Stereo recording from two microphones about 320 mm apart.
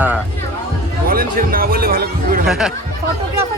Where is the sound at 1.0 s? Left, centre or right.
Right.